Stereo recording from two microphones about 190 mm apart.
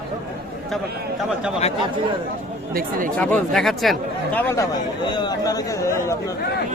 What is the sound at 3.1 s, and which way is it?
Speech, 5° left (ahead or behind).